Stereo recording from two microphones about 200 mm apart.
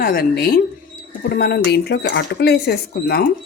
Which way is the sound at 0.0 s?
50° left (ahead or behind).